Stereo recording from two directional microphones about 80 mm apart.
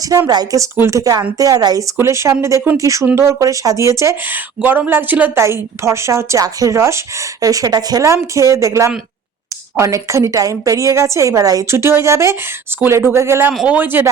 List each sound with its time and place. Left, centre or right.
0.3 s a woman's voice: right
2.0 s a woman's voice: right
4.3 s speech: right
5.4 s a woman's voice: right
8.0 s a woman's voice: right
11.7 s a woman's voice: right
13.7 s speech: right